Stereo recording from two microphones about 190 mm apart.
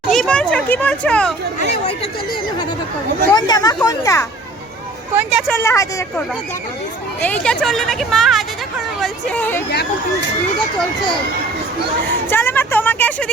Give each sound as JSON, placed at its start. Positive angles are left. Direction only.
{"t": 0.1, "sound": "children playing", "side_deg": 5}
{"t": 0.5, "sound": "speech", "side_deg": 10}
{"t": 1.9, "sound": "speech", "side_deg": 30}
{"t": 5.1, "sound": "a woman's voice", "side_deg": -5}
{"t": 5.5, "sound": "a woman's voice", "side_deg": 15}
{"t": 12.3, "sound": "speech", "side_deg": 10}